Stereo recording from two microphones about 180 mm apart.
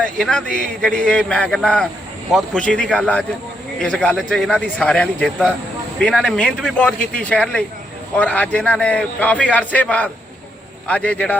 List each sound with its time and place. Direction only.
0.0 s a man's voice: 5° left (ahead or behind)